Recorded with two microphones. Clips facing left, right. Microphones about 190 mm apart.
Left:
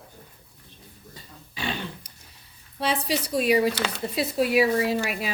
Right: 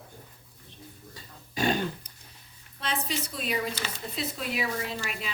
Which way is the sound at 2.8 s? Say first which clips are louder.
Left 6 dB; 70° left (ahead or behind).